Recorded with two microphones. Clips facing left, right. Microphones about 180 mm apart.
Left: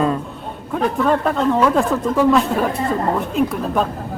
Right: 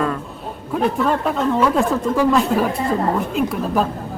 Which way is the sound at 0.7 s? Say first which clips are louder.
Left 1 dB; centre (ahead or behind).